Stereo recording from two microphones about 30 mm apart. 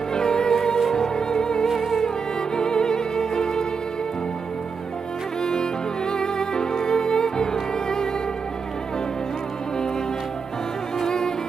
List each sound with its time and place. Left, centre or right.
0.1 s music: left
1.6 s music: centre
2.6 s music: left
5.4 s music: left
11.0 s music: left